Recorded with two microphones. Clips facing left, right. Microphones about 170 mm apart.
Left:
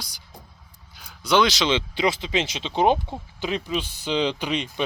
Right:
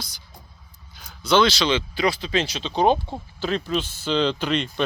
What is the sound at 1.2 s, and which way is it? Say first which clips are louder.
Speech: right 1 dB; 15° left (ahead or behind).